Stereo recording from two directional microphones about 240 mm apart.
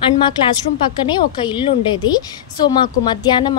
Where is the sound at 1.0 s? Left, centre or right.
Centre.